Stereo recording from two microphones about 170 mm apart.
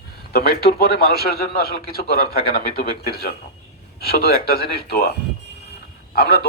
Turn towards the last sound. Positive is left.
turn(degrees=65)  # may be behind; listen again after turning